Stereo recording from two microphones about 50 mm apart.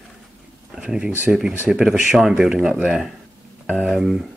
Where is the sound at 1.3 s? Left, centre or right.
Centre.